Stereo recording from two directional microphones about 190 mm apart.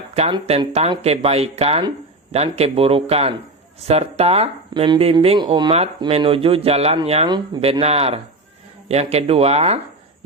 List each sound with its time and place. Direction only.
0.1 s speech: 35° right (ahead or behind)